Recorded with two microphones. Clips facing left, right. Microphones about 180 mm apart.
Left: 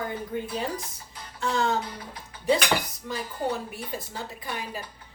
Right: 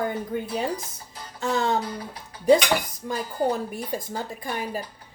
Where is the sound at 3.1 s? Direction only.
45° right (ahead or behind).